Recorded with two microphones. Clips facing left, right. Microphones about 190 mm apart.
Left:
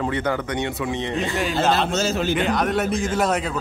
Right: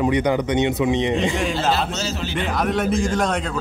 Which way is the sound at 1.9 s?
50° left (ahead or behind).